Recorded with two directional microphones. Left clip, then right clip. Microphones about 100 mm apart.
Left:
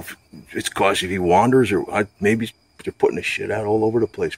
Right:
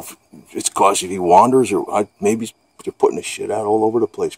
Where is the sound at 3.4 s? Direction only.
90° right.